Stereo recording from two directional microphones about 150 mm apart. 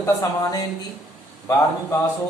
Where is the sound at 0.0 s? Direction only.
20° left (ahead or behind).